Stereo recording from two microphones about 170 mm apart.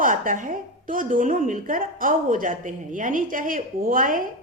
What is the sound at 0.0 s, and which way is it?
A woman's voice, 50° right (ahead or behind).